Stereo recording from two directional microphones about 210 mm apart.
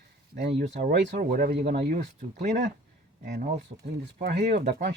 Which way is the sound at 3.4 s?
35° right (ahead or behind).